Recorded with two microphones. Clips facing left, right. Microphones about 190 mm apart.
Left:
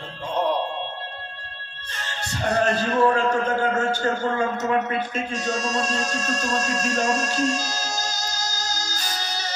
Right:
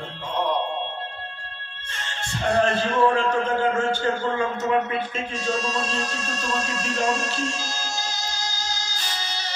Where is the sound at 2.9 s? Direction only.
40° left (ahead or behind).